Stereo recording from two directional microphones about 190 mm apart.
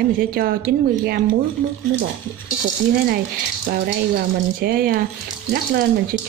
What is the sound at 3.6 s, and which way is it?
Speech, 55° right (ahead or behind).